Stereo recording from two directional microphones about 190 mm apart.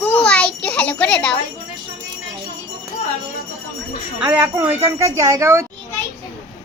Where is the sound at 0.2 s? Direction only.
5° left (ahead or behind).